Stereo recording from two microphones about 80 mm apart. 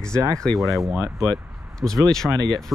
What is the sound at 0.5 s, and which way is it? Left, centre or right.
Speech, centre.